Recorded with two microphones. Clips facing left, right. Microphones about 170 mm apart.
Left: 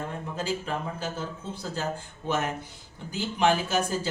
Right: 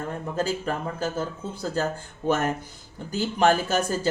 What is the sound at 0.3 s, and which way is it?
Speech, 45° right (ahead or behind).